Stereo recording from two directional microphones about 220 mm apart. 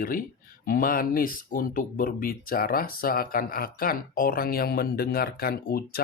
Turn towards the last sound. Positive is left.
turn(degrees=45)  # may be behind; listen again after turning